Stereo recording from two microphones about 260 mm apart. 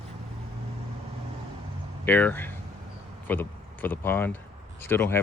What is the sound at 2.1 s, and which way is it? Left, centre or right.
Speech, centre.